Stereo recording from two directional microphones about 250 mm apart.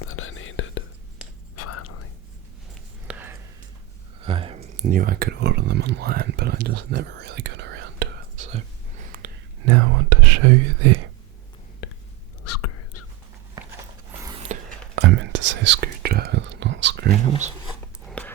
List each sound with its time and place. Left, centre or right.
0.0 s whispering: left
1.6 s whispering: left
3.1 s a sound: centre
4.2 s a sound: right
4.9 s speech: right
8.5 s whispering: right
9.6 s whispering: right
11.8 s whispering: left
12.5 s whispering: left
14.4 s whispering: right
15.0 s whispering: right
18.1 s a sound: centre